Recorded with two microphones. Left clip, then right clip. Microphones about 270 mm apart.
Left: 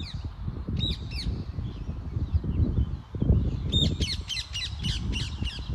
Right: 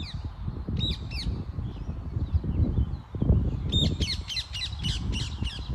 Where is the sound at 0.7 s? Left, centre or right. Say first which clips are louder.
Even; centre.